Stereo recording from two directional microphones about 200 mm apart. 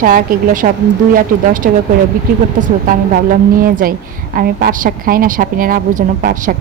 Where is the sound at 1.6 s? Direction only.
50° right (ahead or behind).